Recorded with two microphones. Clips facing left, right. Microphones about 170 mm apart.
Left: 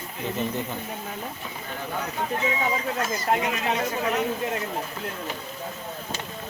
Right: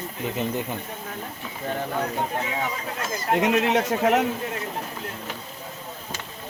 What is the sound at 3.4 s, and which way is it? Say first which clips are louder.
Speech: right 5 dB; 75° right (ahead or behind).